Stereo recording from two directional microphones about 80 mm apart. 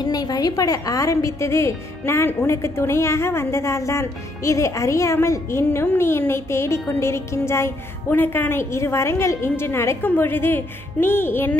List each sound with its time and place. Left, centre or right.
0.0 s a woman's voice: left